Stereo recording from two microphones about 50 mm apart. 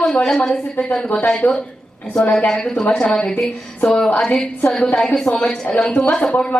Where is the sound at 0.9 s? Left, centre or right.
Left.